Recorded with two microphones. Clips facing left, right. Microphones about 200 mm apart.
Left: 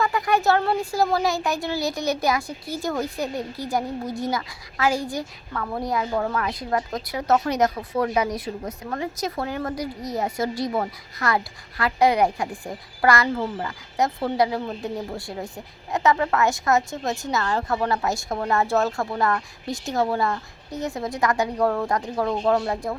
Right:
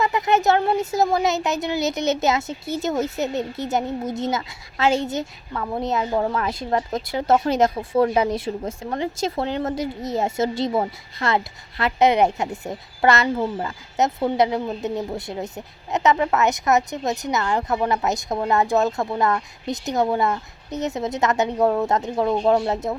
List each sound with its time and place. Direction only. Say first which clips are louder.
0.0 s speech: right 2 dB; 20° right (ahead or behind)